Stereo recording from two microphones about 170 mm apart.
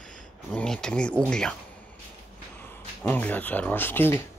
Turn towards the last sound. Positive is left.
turn(degrees=15)  # may be behind; listen again after turning